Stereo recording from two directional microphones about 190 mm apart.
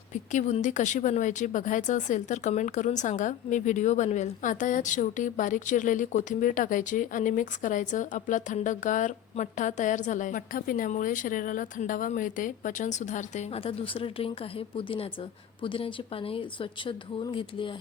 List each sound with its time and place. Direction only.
0.1 s speech: 40° left (ahead or behind)